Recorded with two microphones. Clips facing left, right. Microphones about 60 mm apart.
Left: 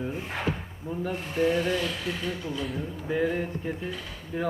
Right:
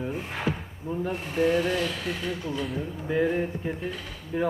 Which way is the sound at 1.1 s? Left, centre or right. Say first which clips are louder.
Right 1 dB; centre.